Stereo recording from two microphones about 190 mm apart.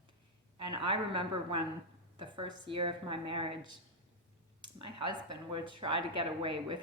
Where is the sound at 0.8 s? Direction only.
25° right (ahead or behind).